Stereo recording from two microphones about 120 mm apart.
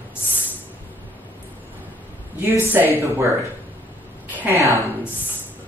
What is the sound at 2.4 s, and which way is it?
Speech, 20° right (ahead or behind).